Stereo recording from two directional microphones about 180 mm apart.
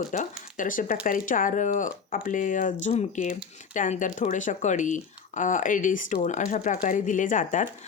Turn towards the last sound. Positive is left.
turn(degrees=45)  # may be behind; listen again after turning